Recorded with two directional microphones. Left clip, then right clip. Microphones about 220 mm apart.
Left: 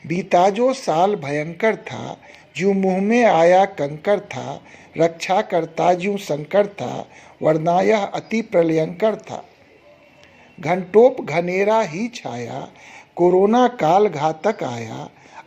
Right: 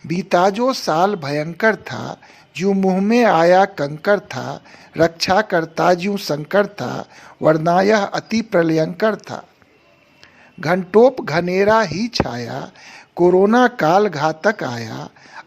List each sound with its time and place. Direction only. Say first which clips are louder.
0.1 s speech: even; 35° right (ahead or behind)
10.6 s speech: right 1 dB; 40° right (ahead or behind)